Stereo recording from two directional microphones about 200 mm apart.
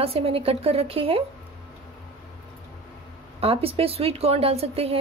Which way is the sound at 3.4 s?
30° right (ahead or behind).